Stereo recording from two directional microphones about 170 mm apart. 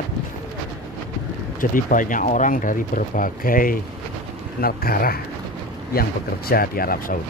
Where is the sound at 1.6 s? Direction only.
50° left (ahead or behind).